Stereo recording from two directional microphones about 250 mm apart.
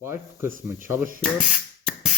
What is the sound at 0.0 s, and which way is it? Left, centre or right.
Speech, centre.